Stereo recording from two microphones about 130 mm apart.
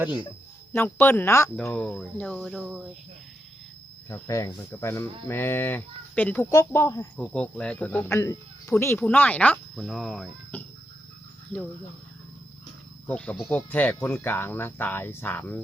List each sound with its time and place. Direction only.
0.7 s speech: 15° left (ahead or behind)
1.7 s speech: 10° left (ahead or behind)
4.1 s speech: 25° left (ahead or behind)
7.2 s speech: 5° left (ahead or behind)
9.8 s speech: centre (ahead or behind)
10.5 s a sound: 10° left (ahead or behind)
13.1 s speech: 10° left (ahead or behind)